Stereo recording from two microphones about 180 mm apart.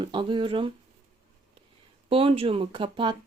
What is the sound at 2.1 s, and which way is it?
Speech, 30° right (ahead or behind).